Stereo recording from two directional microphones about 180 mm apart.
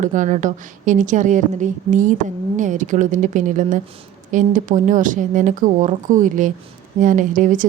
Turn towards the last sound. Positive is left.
turn(degrees=-45)  # may be behind; listen again after turning